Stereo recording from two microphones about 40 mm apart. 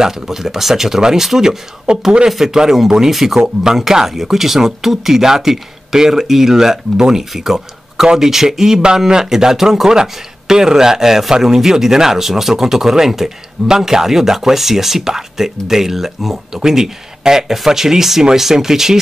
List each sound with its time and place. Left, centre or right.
0.0 s speech: centre
1.9 s speech: right
2.2 s speech: centre